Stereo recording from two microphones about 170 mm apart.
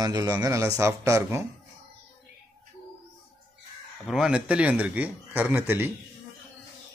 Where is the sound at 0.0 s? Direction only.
20° right (ahead or behind).